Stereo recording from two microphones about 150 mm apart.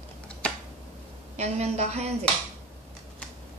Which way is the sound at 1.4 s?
45° right (ahead or behind).